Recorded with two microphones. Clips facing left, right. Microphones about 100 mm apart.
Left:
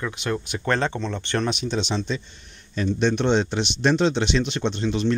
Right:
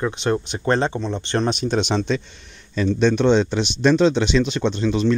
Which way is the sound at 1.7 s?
60° right (ahead or behind).